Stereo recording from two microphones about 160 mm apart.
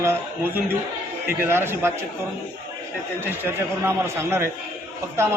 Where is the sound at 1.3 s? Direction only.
15° right (ahead or behind).